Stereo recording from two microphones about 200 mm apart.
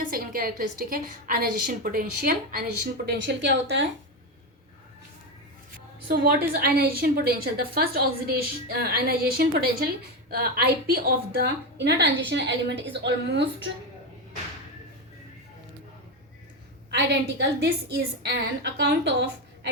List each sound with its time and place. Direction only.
0.1 s a woman's voice: 45° right (ahead or behind); by 3.8 s 65° right (ahead or behind)
6.5 s a woman's voice: 50° right (ahead or behind)
16.9 s a woman's voice: 60° right (ahead or behind)